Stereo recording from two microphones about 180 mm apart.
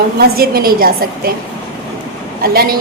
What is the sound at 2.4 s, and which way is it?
Speech, 55° right (ahead or behind).